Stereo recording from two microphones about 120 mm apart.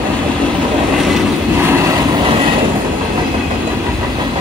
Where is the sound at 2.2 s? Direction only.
45° right (ahead or behind).